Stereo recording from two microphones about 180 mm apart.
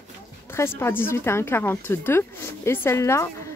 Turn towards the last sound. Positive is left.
turn(degrees=15)  # may be behind; listen again after turning